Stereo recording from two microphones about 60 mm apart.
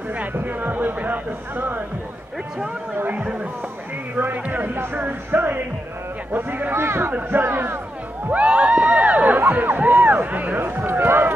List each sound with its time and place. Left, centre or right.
0.1 s speech: right
3.0 s speech: right
8.3 s a sound: right
9.5 s speech: right